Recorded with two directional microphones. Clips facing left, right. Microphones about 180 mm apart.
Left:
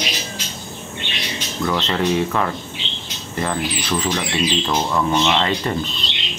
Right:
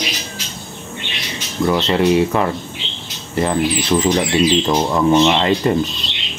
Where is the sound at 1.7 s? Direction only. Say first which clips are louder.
Right 5 dB; 15° right (ahead or behind).